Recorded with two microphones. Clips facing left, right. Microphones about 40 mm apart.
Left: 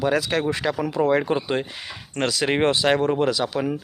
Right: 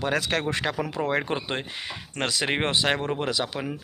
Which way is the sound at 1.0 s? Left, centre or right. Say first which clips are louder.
Left 6 dB; right.